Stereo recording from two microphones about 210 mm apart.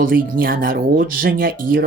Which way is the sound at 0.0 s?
40° right (ahead or behind).